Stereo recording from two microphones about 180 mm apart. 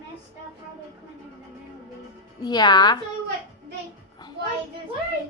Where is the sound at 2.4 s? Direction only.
25° left (ahead or behind).